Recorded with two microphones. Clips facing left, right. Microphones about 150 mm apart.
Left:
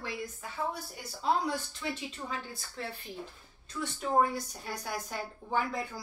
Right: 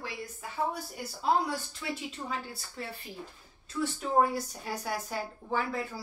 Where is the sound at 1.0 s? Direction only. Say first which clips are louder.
Right 2 dB; 5° right (ahead or behind).